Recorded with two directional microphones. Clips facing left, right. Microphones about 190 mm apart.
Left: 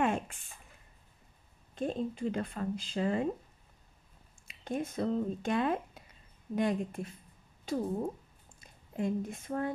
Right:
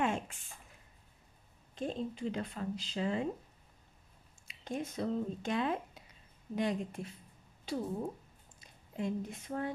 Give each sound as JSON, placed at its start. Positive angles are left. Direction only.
{"t": 0.0, "sound": "a sound", "side_deg": 55}
{"t": 1.8, "sound": "speech", "side_deg": 50}
{"t": 4.5, "sound": "speech", "side_deg": 55}